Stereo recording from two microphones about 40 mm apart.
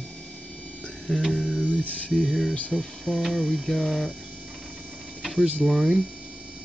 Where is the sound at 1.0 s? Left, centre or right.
Centre.